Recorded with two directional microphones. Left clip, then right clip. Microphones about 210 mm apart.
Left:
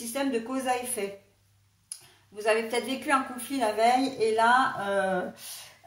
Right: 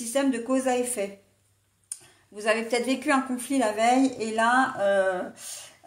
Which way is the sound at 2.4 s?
50° right (ahead or behind).